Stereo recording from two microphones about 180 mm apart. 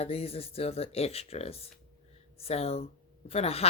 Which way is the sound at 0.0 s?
35° left (ahead or behind).